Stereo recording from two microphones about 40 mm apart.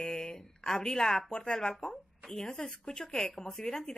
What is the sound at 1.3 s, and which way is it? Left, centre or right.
Speech, centre.